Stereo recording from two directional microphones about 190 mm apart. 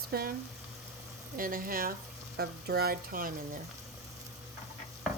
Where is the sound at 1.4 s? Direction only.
50° right (ahead or behind).